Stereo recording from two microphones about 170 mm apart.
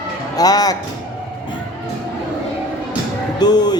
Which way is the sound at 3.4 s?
25° left (ahead or behind).